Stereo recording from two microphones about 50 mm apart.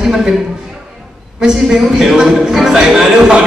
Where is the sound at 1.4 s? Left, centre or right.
Centre.